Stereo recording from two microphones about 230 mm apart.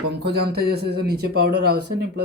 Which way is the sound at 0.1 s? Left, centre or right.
Right.